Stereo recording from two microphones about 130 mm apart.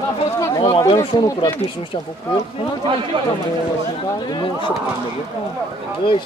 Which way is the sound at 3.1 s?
35° right (ahead or behind).